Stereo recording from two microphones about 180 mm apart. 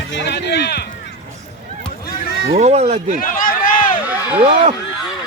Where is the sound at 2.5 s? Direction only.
35° right (ahead or behind).